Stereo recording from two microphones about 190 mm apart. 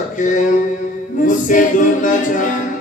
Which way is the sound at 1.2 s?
45° left (ahead or behind).